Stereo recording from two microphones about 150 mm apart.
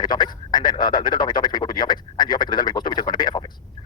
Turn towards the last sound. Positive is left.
turn(degrees=30)  # may be behind; listen again after turning